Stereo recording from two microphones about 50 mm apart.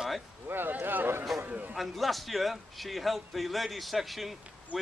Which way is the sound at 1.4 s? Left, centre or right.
Right.